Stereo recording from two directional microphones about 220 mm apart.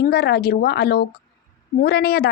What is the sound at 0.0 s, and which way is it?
Speech, 45° left (ahead or behind).